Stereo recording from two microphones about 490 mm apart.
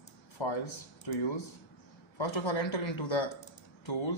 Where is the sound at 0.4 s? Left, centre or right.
Left.